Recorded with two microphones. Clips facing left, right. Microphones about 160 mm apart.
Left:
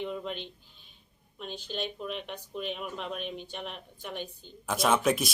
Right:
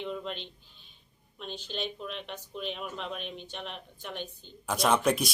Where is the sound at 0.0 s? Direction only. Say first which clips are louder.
Left 1 dB; 10° left (ahead or behind).